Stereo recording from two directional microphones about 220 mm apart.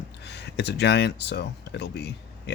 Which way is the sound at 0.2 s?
50° left (ahead or behind).